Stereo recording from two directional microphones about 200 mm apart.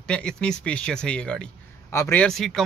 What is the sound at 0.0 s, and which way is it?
Speech, 5° left (ahead or behind).